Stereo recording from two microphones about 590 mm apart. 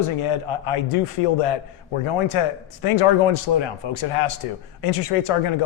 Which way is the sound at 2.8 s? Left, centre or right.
Left.